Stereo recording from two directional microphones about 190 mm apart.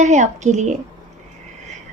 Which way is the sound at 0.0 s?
40° right (ahead or behind).